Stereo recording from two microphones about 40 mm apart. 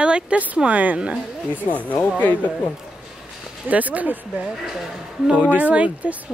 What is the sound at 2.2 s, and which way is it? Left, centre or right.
Speech, left.